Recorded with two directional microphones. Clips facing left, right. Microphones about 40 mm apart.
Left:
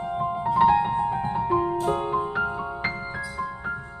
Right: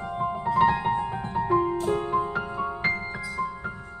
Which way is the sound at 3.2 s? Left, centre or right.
Left.